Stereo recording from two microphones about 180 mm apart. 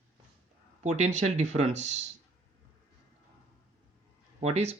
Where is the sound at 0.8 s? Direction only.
40° right (ahead or behind).